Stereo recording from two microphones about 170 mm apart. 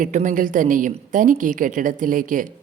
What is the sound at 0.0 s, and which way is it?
A woman's voice, 50° right (ahead or behind).